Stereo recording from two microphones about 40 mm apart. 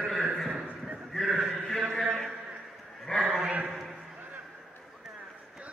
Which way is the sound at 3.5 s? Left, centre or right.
Right.